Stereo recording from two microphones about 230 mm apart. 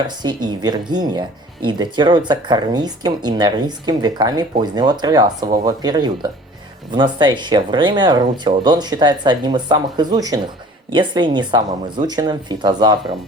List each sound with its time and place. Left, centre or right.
0.2 s speech: centre